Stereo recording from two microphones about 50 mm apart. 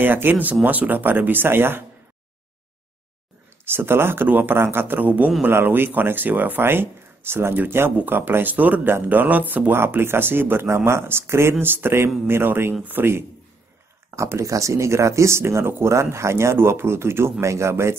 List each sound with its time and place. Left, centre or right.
0.0 s speech: right
3.6 s speech: right
5.5 s speech: right
6.6 s speech: right
9.7 s speech: right
11.6 s speech: right
14.1 s speech: right
16.5 s speech: right